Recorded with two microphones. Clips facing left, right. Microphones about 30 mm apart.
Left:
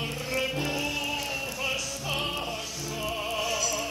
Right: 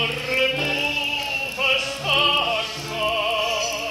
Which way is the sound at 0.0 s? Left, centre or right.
Right.